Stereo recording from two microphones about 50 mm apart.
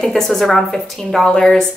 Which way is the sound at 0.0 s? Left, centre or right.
Centre.